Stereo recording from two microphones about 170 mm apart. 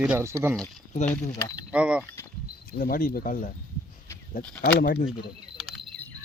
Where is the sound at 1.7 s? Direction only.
5° right (ahead or behind).